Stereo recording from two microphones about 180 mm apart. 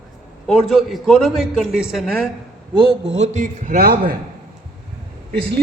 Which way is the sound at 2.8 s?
30° right (ahead or behind).